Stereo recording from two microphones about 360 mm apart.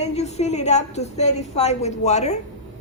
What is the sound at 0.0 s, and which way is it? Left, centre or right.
A woman's voice, centre.